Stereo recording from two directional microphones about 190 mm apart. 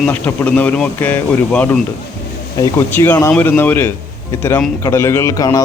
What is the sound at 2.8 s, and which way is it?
Speech, 10° left (ahead or behind).